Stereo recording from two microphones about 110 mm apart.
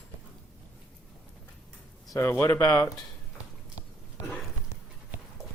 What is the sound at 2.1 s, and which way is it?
Speech, 25° left (ahead or behind).